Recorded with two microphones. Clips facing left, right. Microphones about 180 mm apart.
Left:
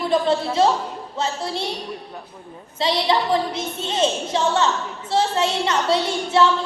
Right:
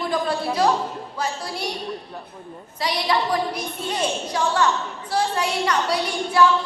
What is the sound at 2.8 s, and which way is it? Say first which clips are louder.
A woman's voice: left 3 dB; 25° left (ahead or behind).